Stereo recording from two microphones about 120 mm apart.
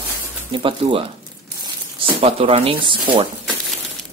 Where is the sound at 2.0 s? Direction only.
55° right (ahead or behind).